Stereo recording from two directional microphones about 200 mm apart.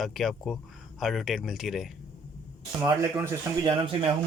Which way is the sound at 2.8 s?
15° right (ahead or behind).